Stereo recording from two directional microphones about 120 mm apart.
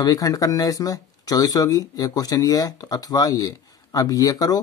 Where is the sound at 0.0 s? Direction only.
30° left (ahead or behind).